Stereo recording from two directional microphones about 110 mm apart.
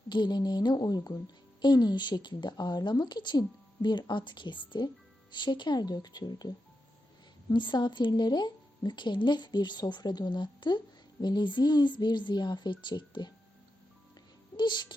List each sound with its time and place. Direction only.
0.1 s a woman's voice: 40° left (ahead or behind)
7.5 s a woman's voice: 45° left (ahead or behind)
14.5 s speech: 45° left (ahead or behind)